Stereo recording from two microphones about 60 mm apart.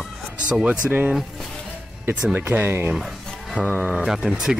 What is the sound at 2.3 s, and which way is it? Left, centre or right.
Speech, right.